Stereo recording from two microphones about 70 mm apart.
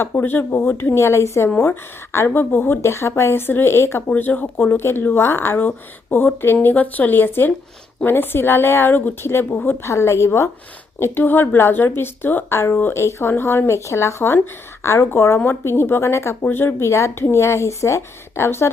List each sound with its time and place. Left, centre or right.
0.0 s speech: left
4.1 s speech: left
9.8 s speech: left